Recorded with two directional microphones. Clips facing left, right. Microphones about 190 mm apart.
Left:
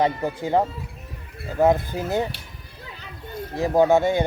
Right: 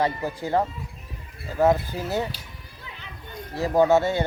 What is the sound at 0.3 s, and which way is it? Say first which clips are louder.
Speech: left 3 dB; 20° left (ahead or behind).